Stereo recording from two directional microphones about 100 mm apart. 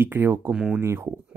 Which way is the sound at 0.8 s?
25° right (ahead or behind).